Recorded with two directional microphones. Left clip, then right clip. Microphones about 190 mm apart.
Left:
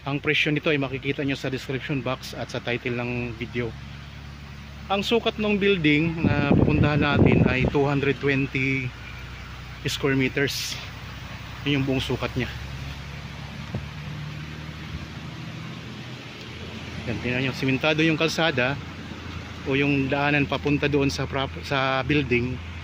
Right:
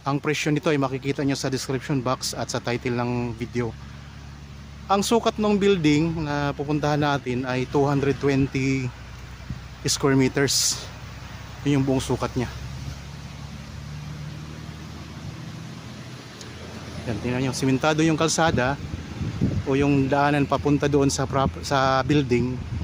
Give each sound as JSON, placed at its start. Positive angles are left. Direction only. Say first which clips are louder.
{"t": 0.0, "sound": "speech", "louder": "left 1 dB", "side_deg": -30}
{"t": 4.9, "sound": "speech", "louder": "right 2 dB", "side_deg": -35}
{"t": 17.2, "sound": "speech", "louder": "even", "side_deg": -20}